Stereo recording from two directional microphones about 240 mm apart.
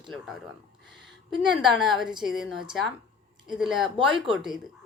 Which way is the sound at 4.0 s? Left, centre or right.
Right.